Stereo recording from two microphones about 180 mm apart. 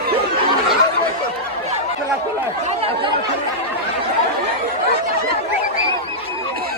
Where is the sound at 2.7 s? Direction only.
30° right (ahead or behind).